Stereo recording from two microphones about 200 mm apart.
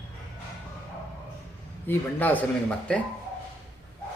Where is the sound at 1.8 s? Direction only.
10° left (ahead or behind).